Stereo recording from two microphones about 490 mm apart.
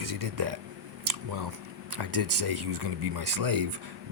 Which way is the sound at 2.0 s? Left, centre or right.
Right.